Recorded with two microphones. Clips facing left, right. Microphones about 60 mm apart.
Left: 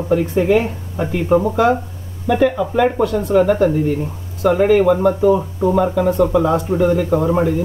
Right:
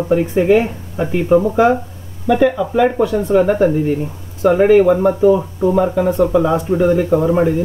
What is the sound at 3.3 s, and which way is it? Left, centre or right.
Speech, centre.